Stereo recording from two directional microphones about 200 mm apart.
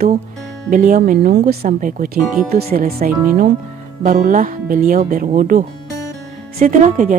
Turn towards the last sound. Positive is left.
turn(degrees=-40)  # may be behind; listen again after turning